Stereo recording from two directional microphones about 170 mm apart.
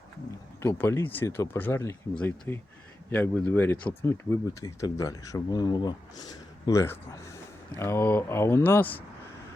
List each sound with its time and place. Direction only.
0.6 s speech: 15° left (ahead or behind)